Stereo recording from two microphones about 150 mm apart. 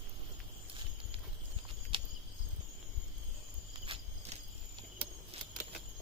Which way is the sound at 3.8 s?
35° right (ahead or behind).